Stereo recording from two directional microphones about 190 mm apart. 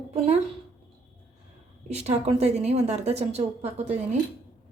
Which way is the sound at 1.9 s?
35° right (ahead or behind).